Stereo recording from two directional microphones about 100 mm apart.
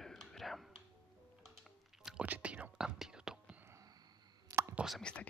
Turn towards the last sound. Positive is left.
turn(degrees=0)  # may be behind; listen again after turning